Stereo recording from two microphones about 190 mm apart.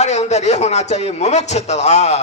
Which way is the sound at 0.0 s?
35° left (ahead or behind).